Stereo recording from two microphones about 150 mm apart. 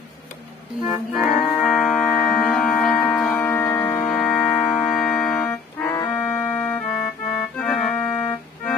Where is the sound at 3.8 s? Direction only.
25° left (ahead or behind).